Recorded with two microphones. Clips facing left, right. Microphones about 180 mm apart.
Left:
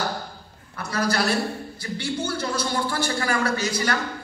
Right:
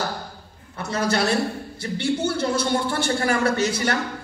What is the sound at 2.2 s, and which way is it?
A woman's voice, 25° right (ahead or behind).